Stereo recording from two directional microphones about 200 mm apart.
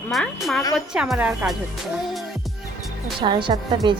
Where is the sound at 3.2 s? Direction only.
25° right (ahead or behind).